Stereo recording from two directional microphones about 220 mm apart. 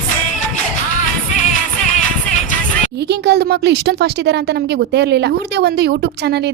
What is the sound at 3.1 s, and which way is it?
A woman's voice, 50° right (ahead or behind).